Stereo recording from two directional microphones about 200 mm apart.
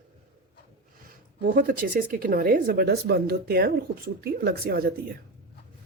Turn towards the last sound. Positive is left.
turn(degrees=-50)  # may be behind; listen again after turning